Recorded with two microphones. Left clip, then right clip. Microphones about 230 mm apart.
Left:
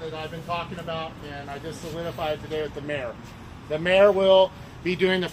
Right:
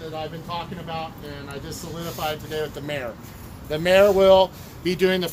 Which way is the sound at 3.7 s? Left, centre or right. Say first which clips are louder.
Right 2 dB; right.